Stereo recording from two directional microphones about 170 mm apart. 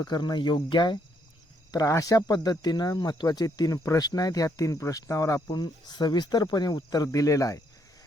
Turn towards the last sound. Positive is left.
turn(degrees=20)  # may be behind; listen again after turning